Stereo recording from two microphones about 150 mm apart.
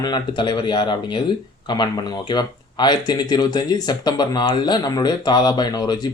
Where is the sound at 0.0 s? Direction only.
30° left (ahead or behind).